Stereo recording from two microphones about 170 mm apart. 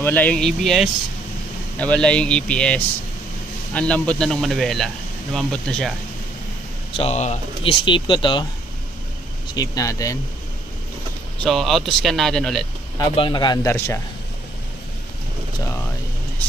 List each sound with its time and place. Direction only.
0.0 s speech: 10° left (ahead or behind)
7.0 s speech: 40° left (ahead or behind)
9.5 s speech: 20° left (ahead or behind)
11.4 s speech: centre (ahead or behind)
13.0 s speech: 30° left (ahead or behind)
13.7 s speech: 15° left (ahead or behind)